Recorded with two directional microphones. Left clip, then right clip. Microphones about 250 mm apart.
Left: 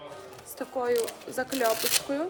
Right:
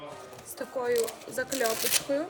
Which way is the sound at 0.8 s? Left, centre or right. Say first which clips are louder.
Left 1 dB; centre.